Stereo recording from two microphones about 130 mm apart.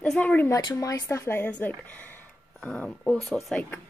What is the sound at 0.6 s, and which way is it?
Speech, 30° left (ahead or behind).